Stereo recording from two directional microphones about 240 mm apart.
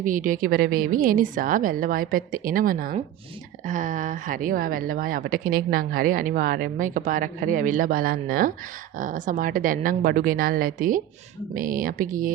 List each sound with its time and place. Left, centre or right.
0.0 s speech: right